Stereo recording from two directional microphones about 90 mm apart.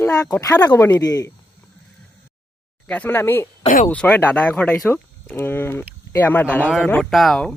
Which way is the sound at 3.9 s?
15° left (ahead or behind).